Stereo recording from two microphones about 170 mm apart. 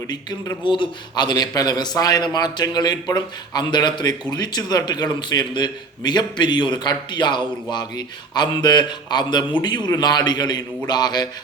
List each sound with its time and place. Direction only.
0.1 s a man's voice: 25° left (ahead or behind)